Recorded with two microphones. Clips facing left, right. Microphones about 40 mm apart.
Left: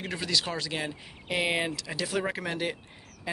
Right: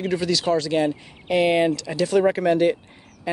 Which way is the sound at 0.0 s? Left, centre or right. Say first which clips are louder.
Right 8 dB; centre.